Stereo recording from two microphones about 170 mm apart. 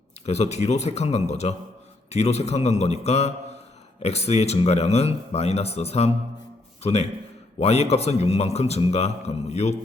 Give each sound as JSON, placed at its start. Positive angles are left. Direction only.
{"t": 0.3, "sound": "a man's voice", "side_deg": 40}